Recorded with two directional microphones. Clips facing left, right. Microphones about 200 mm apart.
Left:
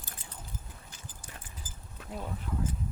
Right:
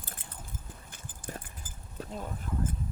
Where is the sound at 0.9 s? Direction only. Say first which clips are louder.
Right 6 dB; 55° right (ahead or behind).